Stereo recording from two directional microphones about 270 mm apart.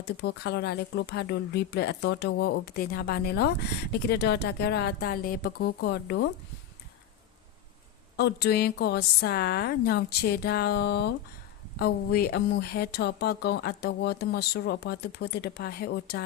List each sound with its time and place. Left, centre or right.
0.2 s speech: left
8.1 s speech: left